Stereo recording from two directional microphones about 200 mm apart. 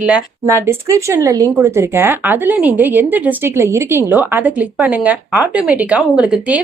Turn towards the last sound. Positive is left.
turn(degrees=-5)  # may be behind; listen again after turning